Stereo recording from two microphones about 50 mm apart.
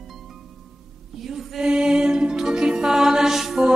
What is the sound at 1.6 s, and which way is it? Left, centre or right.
Music, centre.